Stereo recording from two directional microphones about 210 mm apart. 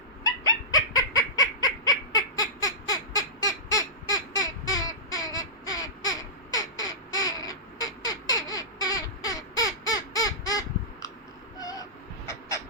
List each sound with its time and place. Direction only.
0.2 s fowl: 15° left (ahead or behind)
11.6 s owl: 15° left (ahead or behind)